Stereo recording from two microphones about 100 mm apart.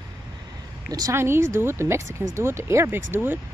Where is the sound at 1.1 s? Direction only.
25° right (ahead or behind).